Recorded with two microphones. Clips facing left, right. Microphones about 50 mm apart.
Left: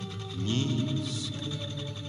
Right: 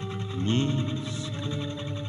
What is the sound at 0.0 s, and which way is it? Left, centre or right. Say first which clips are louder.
Music: right 5 dB; right.